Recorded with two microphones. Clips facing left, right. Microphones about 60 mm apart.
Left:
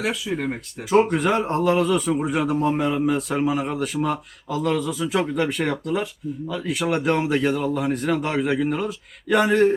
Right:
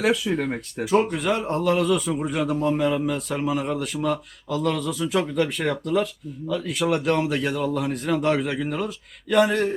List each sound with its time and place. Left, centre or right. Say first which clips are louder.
0.0 s a man's voice: right 3 dB; centre
5.0 s speech: right 1 dB; left
5.3 s speech: left 1 dB; centre
5.8 s a man's voice: right 1 dB; centre